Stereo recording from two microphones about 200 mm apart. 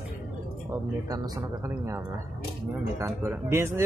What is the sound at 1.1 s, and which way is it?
A man's voice, 15° right (ahead or behind).